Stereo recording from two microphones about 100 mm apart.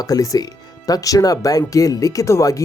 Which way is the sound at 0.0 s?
35° left (ahead or behind).